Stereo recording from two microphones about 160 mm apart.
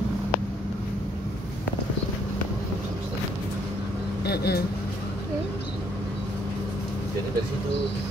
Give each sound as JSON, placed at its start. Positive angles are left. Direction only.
{"t": 4.2, "sound": "speech", "side_deg": 85}